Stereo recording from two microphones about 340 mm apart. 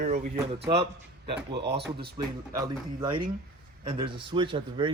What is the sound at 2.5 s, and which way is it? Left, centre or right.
Speech, centre.